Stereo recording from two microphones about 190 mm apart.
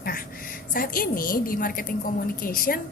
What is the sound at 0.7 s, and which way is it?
A woman's voice, 50° left (ahead or behind).